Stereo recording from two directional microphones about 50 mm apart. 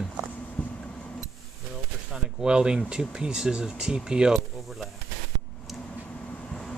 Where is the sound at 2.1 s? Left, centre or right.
Centre.